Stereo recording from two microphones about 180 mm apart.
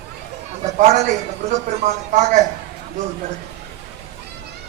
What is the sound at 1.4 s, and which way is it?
Music, 40° right (ahead or behind).